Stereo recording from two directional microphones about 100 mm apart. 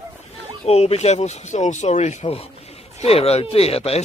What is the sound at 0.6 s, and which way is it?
Speech, 90° left.